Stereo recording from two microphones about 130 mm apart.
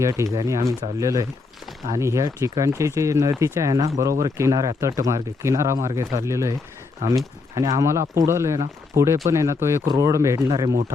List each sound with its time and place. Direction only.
0.0 s speech: 25° right (ahead or behind)